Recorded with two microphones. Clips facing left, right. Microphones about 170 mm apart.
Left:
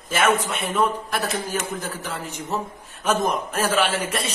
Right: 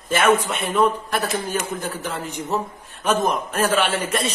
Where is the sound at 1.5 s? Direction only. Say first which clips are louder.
Right 2 dB; 5° left (ahead or behind).